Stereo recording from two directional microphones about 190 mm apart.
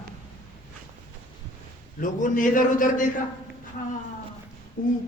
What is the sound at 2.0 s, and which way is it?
Speech, 45° left (ahead or behind).